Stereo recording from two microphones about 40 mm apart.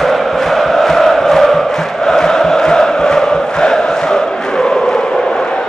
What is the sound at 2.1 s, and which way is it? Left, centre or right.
Chant, centre.